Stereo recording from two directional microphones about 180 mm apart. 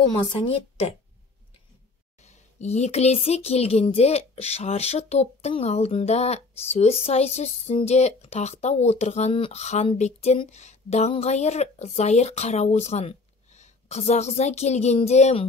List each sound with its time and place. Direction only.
0.2 s speech: 30° left (ahead or behind)
2.2 s speech: 40° left (ahead or behind)